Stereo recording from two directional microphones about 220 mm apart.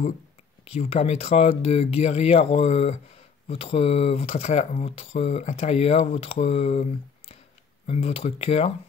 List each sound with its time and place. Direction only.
0.7 s speech: 25° left (ahead or behind)